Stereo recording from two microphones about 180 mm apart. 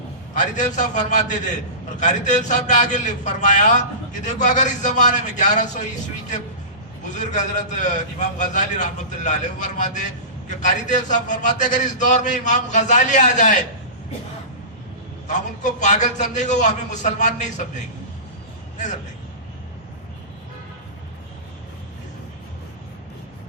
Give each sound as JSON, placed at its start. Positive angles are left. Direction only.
{"t": 0.3, "sound": "a man's voice", "side_deg": 45}
{"t": 7.0, "sound": "a man's voice", "side_deg": 40}
{"t": 15.3, "sound": "a man's voice", "side_deg": 40}